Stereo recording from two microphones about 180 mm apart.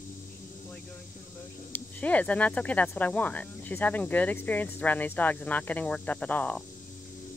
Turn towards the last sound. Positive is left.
turn(degrees=5)  # may be behind; listen again after turning